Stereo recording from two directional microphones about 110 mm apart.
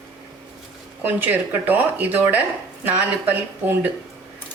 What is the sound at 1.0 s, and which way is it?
Speech, 15° right (ahead or behind).